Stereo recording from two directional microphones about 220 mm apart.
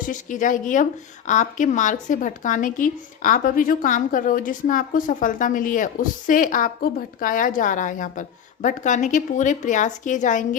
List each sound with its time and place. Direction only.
0.0 s a woman's voice: 35° left (ahead or behind)